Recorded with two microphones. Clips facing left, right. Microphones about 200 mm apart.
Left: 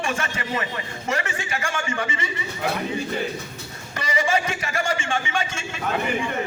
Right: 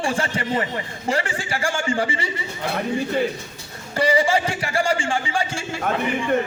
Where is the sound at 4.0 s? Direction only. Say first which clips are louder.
Right 5 dB; 30° right (ahead or behind).